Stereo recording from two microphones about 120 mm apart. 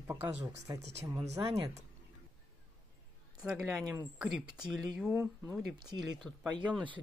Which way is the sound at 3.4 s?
5° right (ahead or behind).